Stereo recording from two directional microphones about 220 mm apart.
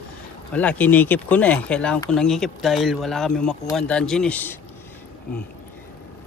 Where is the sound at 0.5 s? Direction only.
5° left (ahead or behind).